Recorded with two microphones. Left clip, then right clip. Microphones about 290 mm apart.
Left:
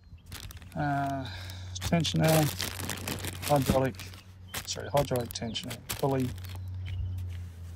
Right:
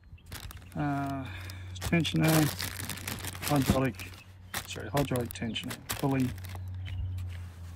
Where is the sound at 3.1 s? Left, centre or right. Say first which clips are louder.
Left 4 dB; centre.